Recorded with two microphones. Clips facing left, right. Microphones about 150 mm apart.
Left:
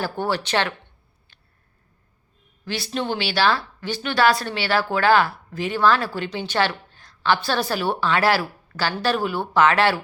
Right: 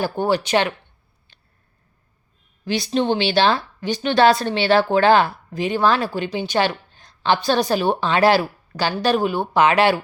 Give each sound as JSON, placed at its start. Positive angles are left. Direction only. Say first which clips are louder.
{"t": 0.0, "sound": "speech", "louder": "right 4 dB", "side_deg": -15}
{"t": 2.6, "sound": "speech", "louder": "right 6 dB", "side_deg": -20}